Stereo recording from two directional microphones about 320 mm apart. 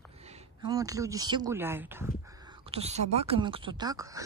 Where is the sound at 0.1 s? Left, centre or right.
Centre.